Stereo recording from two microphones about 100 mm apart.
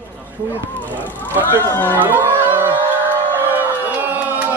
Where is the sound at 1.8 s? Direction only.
20° right (ahead or behind).